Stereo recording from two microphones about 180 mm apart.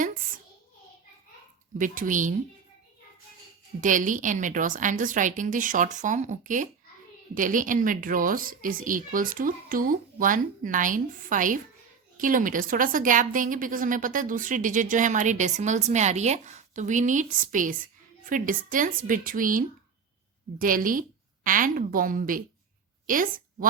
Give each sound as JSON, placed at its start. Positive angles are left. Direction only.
{"t": 1.8, "sound": "a woman's voice", "side_deg": -45}
{"t": 3.8, "sound": "a woman's voice", "side_deg": -45}